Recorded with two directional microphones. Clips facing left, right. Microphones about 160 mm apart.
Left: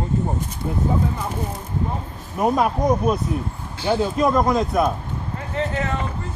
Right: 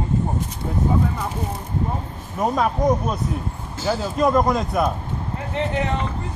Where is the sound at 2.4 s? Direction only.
10° left (ahead or behind).